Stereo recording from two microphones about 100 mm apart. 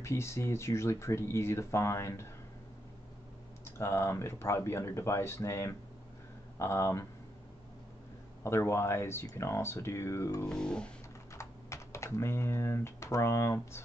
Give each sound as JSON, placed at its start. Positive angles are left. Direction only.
{"t": 0.0, "sound": "speech", "side_deg": 25}
{"t": 3.6, "sound": "speech", "side_deg": 25}
{"t": 8.5, "sound": "speech", "side_deg": 25}
{"t": 10.4, "sound": "speech", "side_deg": 10}
{"t": 11.3, "sound": "speech", "side_deg": 30}